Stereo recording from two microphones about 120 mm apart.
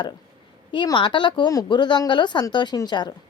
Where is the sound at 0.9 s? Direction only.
40° left (ahead or behind).